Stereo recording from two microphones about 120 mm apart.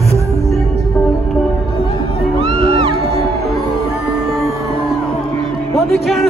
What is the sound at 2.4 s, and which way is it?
Music, 45° right (ahead or behind).